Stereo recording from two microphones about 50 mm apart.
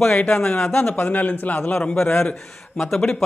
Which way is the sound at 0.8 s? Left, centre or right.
Left.